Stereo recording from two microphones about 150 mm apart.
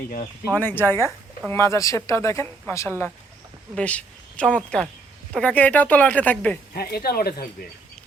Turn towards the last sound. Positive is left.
turn(degrees=90)